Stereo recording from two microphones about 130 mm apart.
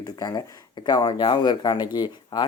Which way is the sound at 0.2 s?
30° left (ahead or behind).